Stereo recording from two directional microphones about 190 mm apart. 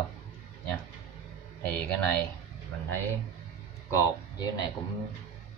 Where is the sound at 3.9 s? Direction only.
20° left (ahead or behind).